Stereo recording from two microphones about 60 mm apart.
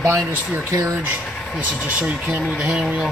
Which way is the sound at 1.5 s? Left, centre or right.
Right.